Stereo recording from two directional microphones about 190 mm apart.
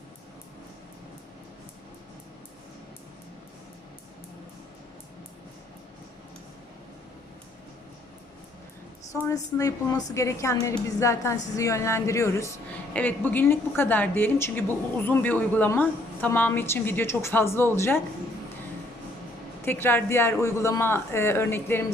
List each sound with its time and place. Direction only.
9.2 s a woman's voice: 15° left (ahead or behind)
19.6 s a woman's voice: 10° left (ahead or behind)